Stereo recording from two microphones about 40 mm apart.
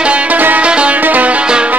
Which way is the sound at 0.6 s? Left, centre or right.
Right.